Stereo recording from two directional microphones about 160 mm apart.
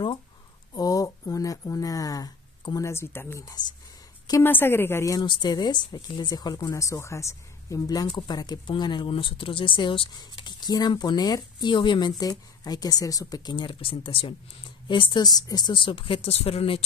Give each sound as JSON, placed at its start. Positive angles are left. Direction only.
{"t": 0.7, "sound": "speech", "side_deg": 20}
{"t": 4.3, "sound": "speech", "side_deg": 15}